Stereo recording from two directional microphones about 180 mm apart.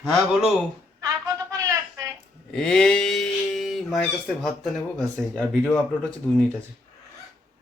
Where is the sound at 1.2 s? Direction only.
20° right (ahead or behind).